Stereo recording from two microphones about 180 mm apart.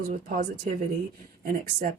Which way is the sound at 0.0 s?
50° right (ahead or behind).